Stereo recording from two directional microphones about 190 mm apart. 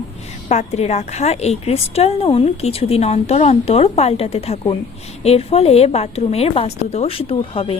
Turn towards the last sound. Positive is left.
turn(degrees=30)  # may be behind; listen again after turning